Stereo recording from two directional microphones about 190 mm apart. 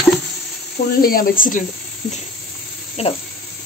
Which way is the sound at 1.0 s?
50° left (ahead or behind).